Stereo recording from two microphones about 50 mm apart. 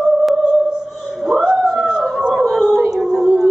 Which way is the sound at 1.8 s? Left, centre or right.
Centre.